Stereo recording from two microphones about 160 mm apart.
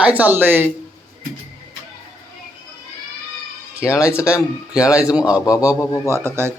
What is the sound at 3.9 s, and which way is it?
Speech, 15° left (ahead or behind).